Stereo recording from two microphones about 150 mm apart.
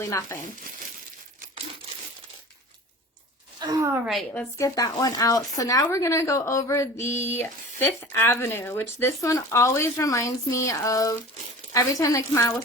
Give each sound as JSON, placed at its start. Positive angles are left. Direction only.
{"t": 0.0, "sound": "speech", "side_deg": 20}
{"t": 3.6, "sound": "a sound", "side_deg": -25}
{"t": 3.9, "sound": "a woman's voice", "side_deg": -5}
{"t": 4.4, "sound": "speech", "side_deg": 20}
{"t": 7.2, "sound": "a sound", "side_deg": 15}
{"t": 8.1, "sound": "speech", "side_deg": 15}